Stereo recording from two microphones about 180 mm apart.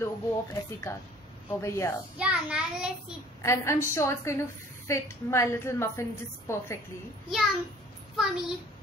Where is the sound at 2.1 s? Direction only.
5° right (ahead or behind).